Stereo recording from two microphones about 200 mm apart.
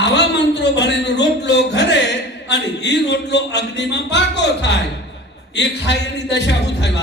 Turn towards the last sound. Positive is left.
turn(degrees=60)  # may be behind; listen again after turning